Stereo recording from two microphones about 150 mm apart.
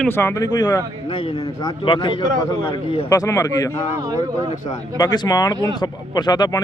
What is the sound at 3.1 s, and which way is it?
Speech, 20° left (ahead or behind).